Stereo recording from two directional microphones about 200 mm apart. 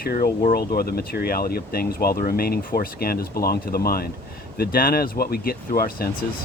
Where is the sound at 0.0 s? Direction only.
45° left (ahead or behind).